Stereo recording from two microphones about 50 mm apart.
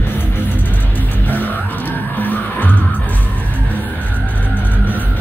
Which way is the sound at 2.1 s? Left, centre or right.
Left.